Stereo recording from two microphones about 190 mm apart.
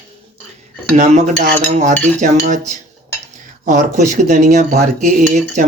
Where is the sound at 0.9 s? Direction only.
40° right (ahead or behind).